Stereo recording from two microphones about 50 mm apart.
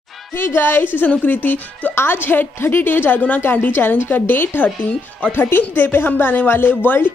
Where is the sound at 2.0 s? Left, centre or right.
Left.